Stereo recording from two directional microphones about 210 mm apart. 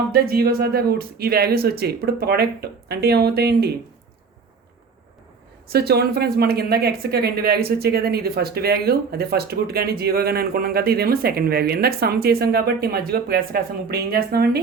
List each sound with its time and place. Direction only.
0.1 s speech: 45° right (ahead or behind)
5.7 s speech: 50° right (ahead or behind)